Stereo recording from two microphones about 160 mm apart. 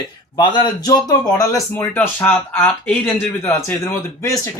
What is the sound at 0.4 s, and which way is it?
Speech, 25° left (ahead or behind).